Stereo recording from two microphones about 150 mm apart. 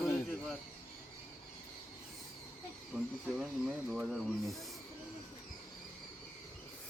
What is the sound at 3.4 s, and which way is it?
Speech, 5° right (ahead or behind).